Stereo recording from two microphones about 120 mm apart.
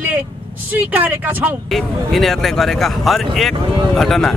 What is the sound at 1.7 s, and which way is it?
Speech, centre (ahead or behind).